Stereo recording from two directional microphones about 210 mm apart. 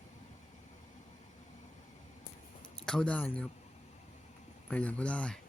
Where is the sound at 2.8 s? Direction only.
5° left (ahead or behind).